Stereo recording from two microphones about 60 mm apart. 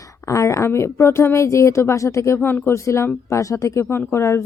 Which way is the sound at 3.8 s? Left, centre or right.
Left.